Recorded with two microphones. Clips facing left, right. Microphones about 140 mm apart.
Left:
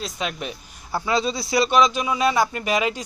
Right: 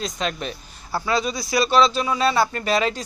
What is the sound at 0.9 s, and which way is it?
Speech, 20° left (ahead or behind).